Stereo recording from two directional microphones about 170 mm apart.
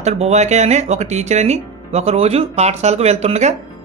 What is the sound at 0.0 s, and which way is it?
Speech, 40° right (ahead or behind).